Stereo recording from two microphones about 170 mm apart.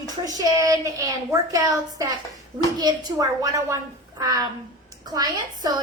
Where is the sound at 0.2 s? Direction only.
20° right (ahead or behind).